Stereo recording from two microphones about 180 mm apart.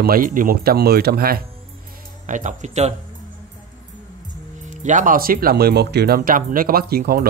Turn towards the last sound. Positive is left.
turn(degrees=-60)  # may be behind; listen again after turning